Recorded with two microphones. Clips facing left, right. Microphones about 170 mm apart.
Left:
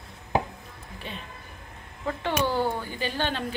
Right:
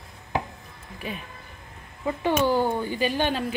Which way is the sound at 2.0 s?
10° right (ahead or behind).